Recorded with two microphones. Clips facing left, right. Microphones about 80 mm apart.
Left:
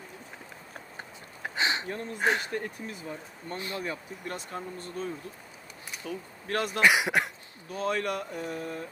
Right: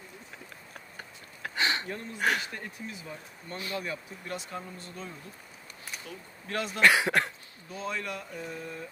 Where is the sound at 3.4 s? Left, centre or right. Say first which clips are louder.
Left 1 dB; left.